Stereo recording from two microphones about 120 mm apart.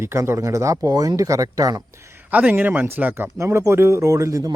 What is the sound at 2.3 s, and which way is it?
Speech, 15° right (ahead or behind).